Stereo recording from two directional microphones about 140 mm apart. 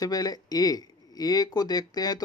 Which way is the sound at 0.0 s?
25° left (ahead or behind).